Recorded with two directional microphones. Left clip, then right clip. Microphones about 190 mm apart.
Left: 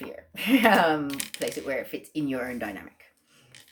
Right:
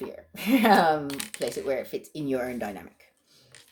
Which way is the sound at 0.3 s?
40° right (ahead or behind).